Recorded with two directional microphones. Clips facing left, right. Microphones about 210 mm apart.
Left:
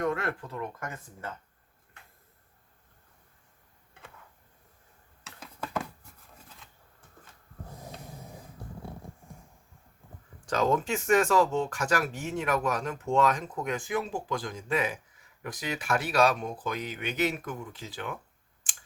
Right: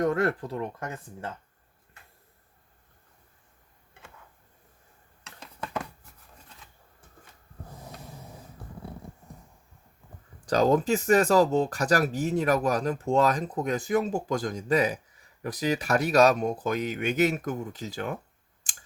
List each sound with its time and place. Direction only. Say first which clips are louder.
0.0 s speech: right 5 dB; 40° right (ahead or behind)
5.2 s a sound: even; 5° left (ahead or behind)
10.4 s speech: right 4 dB; 35° right (ahead or behind)
18.7 s typing: right 1 dB; 40° right (ahead or behind)